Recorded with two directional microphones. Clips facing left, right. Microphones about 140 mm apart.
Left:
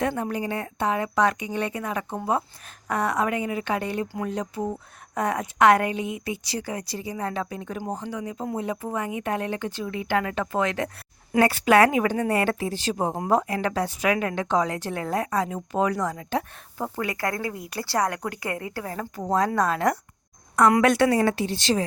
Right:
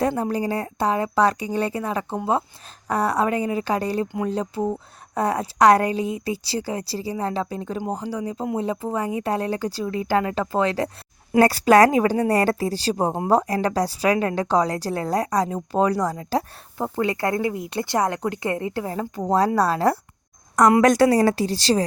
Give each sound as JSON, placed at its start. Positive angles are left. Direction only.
{"t": 0.2, "sound": "a woman's voice", "side_deg": -35}